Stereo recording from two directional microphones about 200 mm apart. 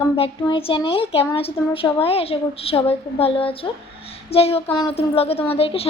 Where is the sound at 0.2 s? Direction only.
25° left (ahead or behind).